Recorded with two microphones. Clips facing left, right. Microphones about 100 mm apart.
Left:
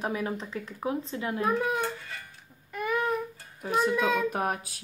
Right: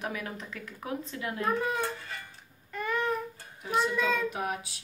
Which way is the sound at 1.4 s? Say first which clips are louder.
Left 2 dB; 10° left (ahead or behind).